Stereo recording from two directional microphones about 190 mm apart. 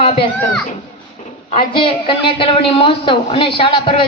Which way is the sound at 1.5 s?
25° left (ahead or behind).